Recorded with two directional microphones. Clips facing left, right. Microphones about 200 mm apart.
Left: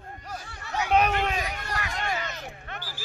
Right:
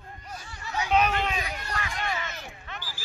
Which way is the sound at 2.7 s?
60° left (ahead or behind).